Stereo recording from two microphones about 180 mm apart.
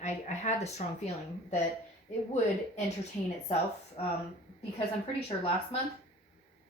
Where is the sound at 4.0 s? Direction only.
35° left (ahead or behind).